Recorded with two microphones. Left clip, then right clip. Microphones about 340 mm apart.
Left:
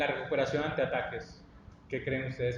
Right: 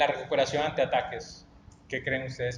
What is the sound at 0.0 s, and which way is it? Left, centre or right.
Speech, right.